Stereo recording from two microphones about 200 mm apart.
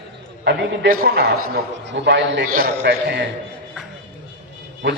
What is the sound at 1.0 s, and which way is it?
A man's voice, 55° right (ahead or behind).